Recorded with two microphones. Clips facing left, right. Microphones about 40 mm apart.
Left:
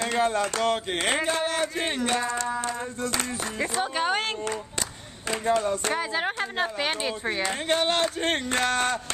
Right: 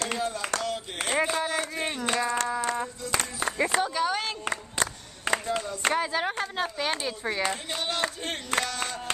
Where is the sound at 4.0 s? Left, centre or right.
Left.